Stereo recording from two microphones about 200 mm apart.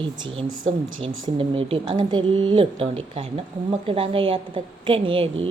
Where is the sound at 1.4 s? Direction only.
25° right (ahead or behind).